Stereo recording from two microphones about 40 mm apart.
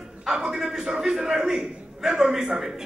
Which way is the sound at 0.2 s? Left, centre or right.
Centre.